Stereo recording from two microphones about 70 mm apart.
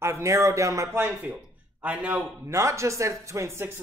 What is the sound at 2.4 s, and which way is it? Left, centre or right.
Speech, right.